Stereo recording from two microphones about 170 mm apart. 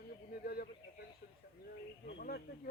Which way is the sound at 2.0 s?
65° left (ahead or behind).